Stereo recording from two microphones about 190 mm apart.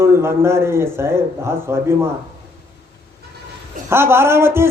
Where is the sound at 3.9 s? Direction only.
15° right (ahead or behind).